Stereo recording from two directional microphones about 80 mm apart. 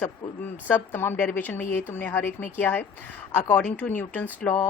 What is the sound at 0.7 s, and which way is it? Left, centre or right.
A woman's voice, left.